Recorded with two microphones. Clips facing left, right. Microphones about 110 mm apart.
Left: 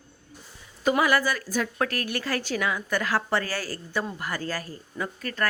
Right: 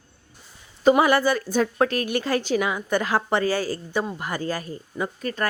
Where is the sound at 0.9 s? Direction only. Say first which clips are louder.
Right 5 dB; 25° right (ahead or behind).